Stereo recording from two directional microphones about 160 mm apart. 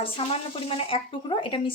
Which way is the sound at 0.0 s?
35° left (ahead or behind).